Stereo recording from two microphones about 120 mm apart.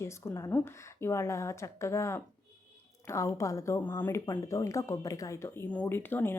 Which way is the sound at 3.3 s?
25° left (ahead or behind).